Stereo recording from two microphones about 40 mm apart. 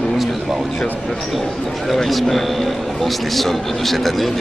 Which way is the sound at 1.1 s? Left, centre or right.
Centre.